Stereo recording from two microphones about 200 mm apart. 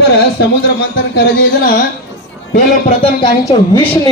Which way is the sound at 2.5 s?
30° left (ahead or behind).